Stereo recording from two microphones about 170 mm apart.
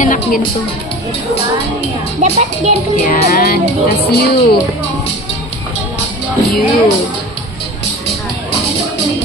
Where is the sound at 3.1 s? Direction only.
60° left (ahead or behind).